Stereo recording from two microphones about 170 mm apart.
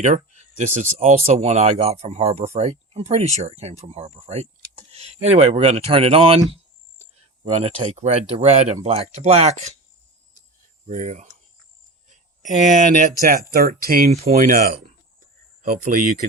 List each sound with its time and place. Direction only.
0.0 s speech: 45° right (ahead or behind)
7.4 s speech: 35° right (ahead or behind)
10.8 s cricket: 45° right (ahead or behind)
12.4 s speech: 45° right (ahead or behind)
14.1 s speech: 40° right (ahead or behind)
14.3 s speech: 55° right (ahead or behind)